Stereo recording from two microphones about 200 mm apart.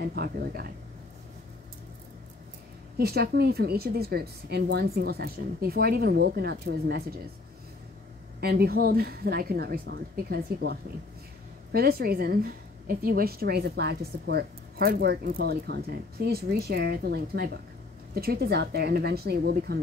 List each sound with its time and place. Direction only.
0.1 s a woman's voice: 50° right (ahead or behind)
3.0 s a woman's voice: 50° right (ahead or behind)
8.4 s a woman's voice: 50° right (ahead or behind)